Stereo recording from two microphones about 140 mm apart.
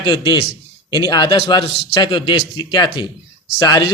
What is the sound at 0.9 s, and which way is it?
Speech, 30° left (ahead or behind).